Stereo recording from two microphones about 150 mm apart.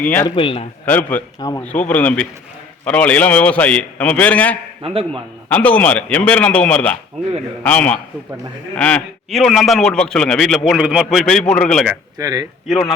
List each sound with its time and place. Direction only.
0.0 s a man's voice: 15° left (ahead or behind)
0.3 s speech: 35° left (ahead or behind)
0.9 s a man's voice: 10° left (ahead or behind)
1.4 s a man's voice: 20° left (ahead or behind)
1.9 s a man's voice: 10° left (ahead or behind)
4.8 s a man's voice: 40° right (ahead or behind)
5.5 s a man's voice: 10° left (ahead or behind)
12.1 s speech: 25° right (ahead or behind)